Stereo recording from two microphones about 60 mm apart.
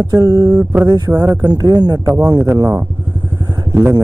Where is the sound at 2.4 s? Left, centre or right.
Right.